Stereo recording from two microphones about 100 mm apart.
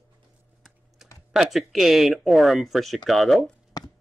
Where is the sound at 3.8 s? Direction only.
40° left (ahead or behind).